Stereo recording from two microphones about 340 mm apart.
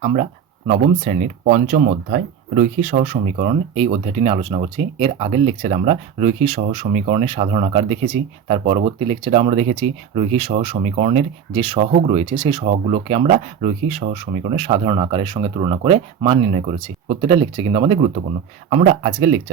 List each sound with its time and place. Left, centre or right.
0.0 s speech: centre